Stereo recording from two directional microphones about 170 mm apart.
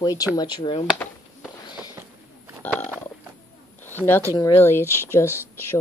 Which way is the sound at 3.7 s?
10° left (ahead or behind).